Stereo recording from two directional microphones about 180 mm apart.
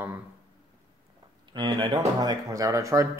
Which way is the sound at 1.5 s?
25° right (ahead or behind).